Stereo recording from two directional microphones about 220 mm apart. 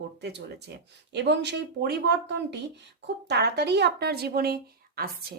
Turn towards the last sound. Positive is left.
turn(degrees=-45)  # may be behind; listen again after turning